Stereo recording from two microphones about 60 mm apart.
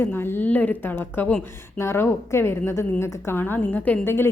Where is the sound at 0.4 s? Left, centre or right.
Left.